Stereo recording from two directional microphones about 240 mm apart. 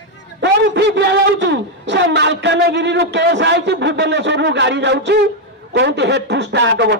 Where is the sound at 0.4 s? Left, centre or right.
Right.